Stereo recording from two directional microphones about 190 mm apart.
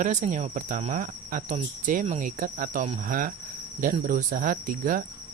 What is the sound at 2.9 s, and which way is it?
Cricket, 45° right (ahead or behind).